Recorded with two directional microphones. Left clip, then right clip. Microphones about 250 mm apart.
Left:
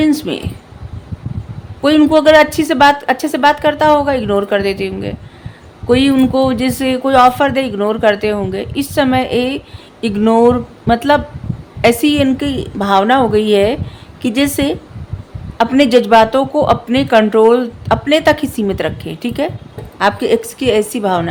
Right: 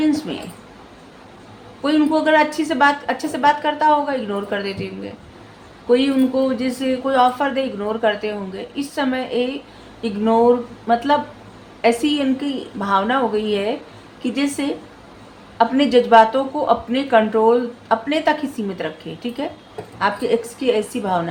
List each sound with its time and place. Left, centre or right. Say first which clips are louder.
0.0 s speech: left 6 dB; left
1.8 s speech: left 8 dB; left